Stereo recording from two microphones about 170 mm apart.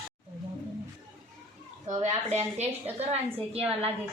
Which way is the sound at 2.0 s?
40° right (ahead or behind).